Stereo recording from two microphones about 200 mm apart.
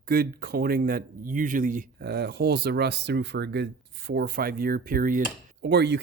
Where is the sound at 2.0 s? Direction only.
55° right (ahead or behind).